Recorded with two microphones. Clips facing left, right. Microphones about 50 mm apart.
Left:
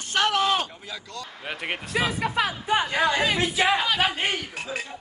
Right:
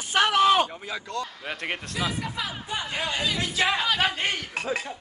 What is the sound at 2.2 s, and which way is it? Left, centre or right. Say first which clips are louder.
Speech: left 7 dB; left.